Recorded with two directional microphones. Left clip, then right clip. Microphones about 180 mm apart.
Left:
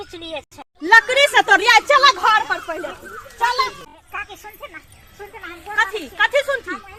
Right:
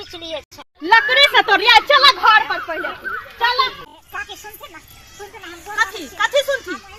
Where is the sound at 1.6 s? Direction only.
Centre (ahead or behind).